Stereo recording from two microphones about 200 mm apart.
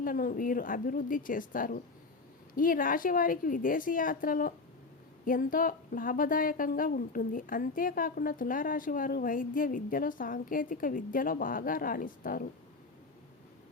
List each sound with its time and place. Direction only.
0.0 s speech: 45° left (ahead or behind)